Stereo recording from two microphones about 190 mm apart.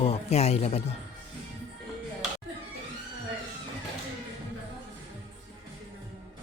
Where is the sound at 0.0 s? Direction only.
35° left (ahead or behind).